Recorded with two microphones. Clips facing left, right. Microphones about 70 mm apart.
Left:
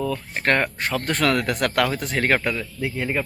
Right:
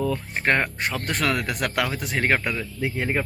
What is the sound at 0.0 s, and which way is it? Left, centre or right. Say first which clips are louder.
Speech: even; centre.